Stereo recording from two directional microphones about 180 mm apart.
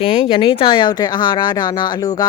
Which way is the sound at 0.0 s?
30° left (ahead or behind).